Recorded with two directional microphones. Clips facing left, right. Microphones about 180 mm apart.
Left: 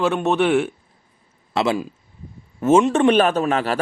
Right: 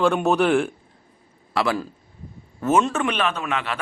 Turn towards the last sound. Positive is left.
turn(degrees=40)  # may be behind; listen again after turning